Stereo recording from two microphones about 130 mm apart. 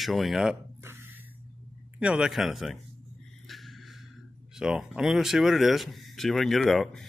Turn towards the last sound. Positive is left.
turn(degrees=0)  # may be behind; listen again after turning